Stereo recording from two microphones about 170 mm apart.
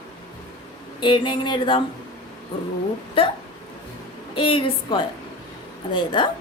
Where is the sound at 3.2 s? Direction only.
30° left (ahead or behind).